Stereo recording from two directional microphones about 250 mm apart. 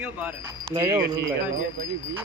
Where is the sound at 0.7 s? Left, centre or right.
Centre.